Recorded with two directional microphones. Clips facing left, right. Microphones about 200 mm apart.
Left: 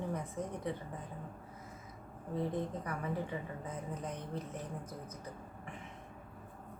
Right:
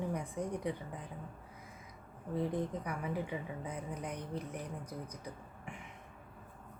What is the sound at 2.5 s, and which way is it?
A woman's voice, 15° right (ahead or behind).